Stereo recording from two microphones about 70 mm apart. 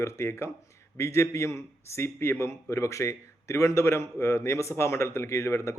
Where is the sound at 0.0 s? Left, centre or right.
Left.